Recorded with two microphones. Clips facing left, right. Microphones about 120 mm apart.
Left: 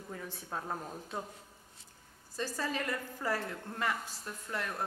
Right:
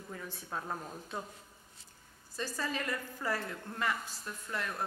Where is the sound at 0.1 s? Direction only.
30° left (ahead or behind).